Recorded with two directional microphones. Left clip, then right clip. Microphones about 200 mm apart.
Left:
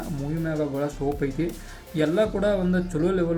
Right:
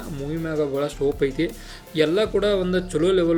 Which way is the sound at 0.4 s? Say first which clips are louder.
Right 3 dB; 30° right (ahead or behind).